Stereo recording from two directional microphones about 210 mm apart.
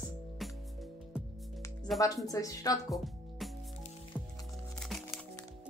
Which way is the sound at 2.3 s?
15° left (ahead or behind).